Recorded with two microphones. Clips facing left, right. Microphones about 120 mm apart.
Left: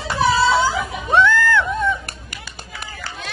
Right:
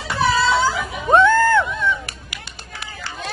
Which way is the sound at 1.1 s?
40° right (ahead or behind).